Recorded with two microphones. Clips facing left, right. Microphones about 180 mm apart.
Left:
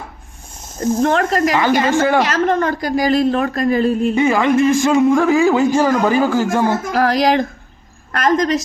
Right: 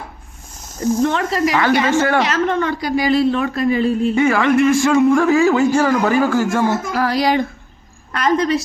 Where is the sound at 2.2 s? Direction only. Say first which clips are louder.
Left 2 dB; 40° left (ahead or behind).